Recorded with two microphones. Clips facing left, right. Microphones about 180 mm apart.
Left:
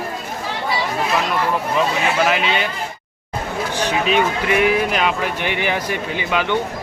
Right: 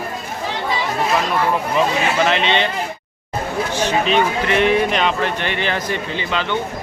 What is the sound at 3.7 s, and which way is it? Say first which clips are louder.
Speech: right 1 dB; 10° left (ahead or behind).